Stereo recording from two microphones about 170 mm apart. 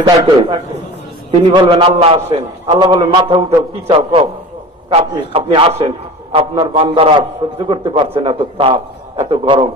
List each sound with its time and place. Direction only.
0.0 s a man's voice: 25° right (ahead or behind); by 2.8 s 40° right (ahead or behind)
2.8 s a man's voice: 25° right (ahead or behind)